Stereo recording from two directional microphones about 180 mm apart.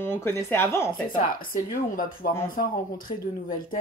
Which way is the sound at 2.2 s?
50° left (ahead or behind).